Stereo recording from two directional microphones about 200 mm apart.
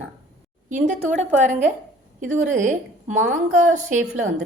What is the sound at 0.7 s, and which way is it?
A woman's voice, 35° right (ahead or behind).